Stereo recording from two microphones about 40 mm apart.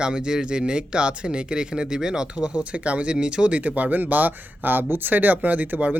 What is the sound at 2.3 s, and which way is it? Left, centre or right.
Speech, right.